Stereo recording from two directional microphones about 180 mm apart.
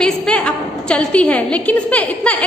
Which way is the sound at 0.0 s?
5° left (ahead or behind).